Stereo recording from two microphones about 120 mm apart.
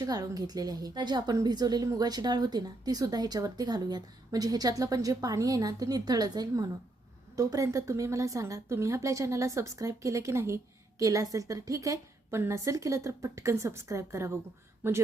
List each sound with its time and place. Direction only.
0.0 s a woman's voice: 30° right (ahead or behind); by 15.0 s 15° right (ahead or behind)